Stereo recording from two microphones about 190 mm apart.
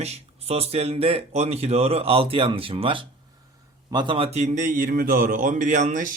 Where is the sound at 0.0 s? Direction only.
35° right (ahead or behind).